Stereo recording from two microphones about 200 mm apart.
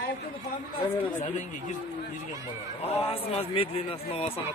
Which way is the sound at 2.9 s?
30° left (ahead or behind).